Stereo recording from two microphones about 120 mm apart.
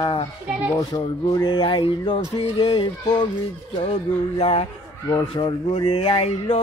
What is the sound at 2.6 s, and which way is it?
Speech, 40° left (ahead or behind).